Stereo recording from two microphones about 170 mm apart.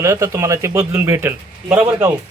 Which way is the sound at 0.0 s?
15° right (ahead or behind).